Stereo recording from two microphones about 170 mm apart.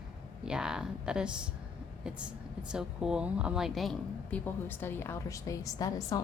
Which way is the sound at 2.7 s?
5° right (ahead or behind).